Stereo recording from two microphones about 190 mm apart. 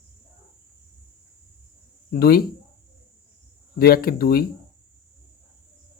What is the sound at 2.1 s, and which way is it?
Speech, 55° left (ahead or behind).